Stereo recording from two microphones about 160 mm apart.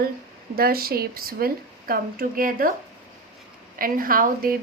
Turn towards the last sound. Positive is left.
turn(degrees=-60)  # may be behind; listen again after turning